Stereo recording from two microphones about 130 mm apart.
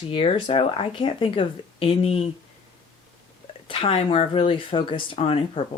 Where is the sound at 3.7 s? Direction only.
50° left (ahead or behind).